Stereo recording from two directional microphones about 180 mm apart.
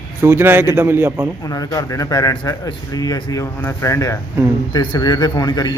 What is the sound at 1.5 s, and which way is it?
A man's voice, 20° left (ahead or behind).